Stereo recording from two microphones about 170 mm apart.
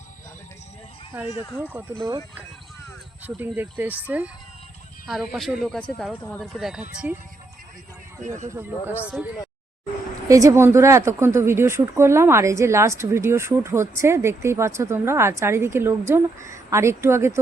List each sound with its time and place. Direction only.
1.7 s speech: 10° right (ahead or behind)
3.2 s speech: 10° right (ahead or behind)
8.4 s speech: 10° right (ahead or behind)
10.2 s speech: 20° right (ahead or behind)